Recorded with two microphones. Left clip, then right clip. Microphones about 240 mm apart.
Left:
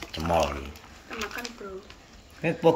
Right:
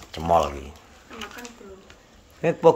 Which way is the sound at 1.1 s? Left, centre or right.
Centre.